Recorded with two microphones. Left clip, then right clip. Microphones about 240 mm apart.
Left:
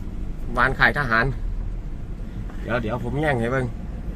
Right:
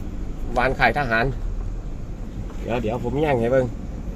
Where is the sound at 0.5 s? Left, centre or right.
Left.